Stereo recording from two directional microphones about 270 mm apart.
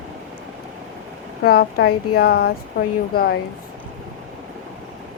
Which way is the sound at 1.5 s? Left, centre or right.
Left.